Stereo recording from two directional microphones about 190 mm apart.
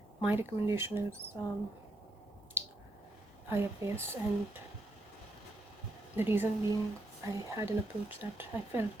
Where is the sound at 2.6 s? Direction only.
10° right (ahead or behind).